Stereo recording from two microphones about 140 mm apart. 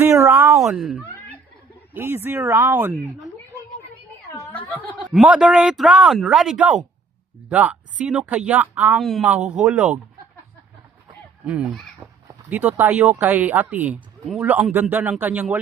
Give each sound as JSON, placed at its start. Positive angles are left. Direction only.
{"t": 0.0, "sound": "a sound", "side_deg": -20}
{"t": 0.6, "sound": "speech", "side_deg": 0}
{"t": 1.9, "sound": "speech", "side_deg": -15}
{"t": 4.7, "sound": "speech", "side_deg": 10}
{"t": 5.1, "sound": "speech", "side_deg": -5}
{"t": 9.0, "sound": "speech", "side_deg": 0}
{"t": 11.4, "sound": "speech", "side_deg": -5}